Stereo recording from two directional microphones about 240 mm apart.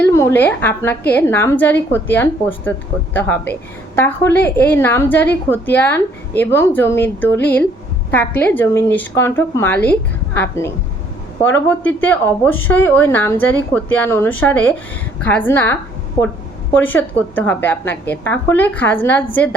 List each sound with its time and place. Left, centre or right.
0.0 s a woman's voice: centre